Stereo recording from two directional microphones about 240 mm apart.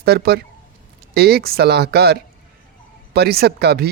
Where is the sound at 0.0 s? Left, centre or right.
Right.